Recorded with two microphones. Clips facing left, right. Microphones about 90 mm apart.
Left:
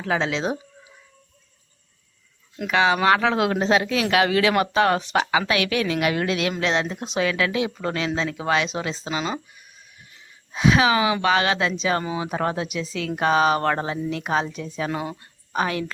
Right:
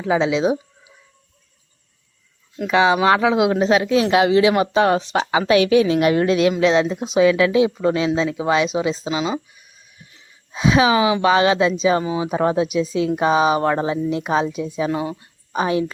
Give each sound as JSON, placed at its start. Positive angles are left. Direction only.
{"t": 0.0, "sound": "speech", "side_deg": -15}
{"t": 2.6, "sound": "speech", "side_deg": -20}
{"t": 4.1, "sound": "speech", "side_deg": -25}
{"t": 10.5, "sound": "speech", "side_deg": -20}